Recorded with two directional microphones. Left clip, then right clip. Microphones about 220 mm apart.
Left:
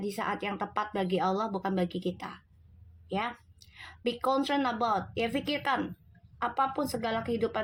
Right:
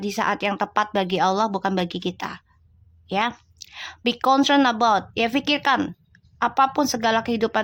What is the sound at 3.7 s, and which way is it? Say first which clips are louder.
A woman's voice: right 8 dB; 30° right (ahead or behind).